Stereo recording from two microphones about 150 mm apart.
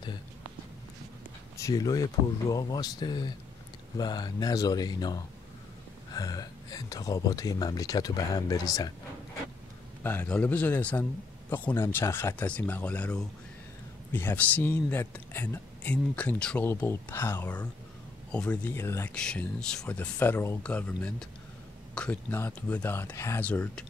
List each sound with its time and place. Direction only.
1.6 s speech: 25° left (ahead or behind)
10.0 s speech: 10° left (ahead or behind)
19.1 s speech: 5° left (ahead or behind)